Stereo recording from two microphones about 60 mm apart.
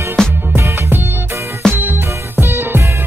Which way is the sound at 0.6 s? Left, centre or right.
Right.